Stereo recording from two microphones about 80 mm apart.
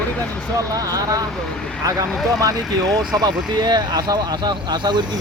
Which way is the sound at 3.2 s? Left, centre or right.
Right.